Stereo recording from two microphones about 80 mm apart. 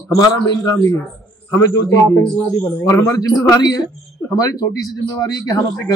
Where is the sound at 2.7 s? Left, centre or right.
Left.